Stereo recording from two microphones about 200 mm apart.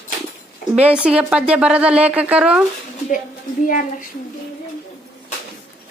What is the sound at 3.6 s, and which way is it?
Speech, 40° left (ahead or behind).